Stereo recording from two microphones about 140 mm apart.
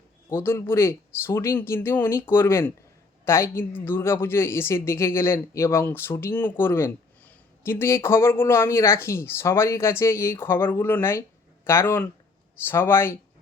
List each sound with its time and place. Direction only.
0.3 s a woman's voice: 15° left (ahead or behind)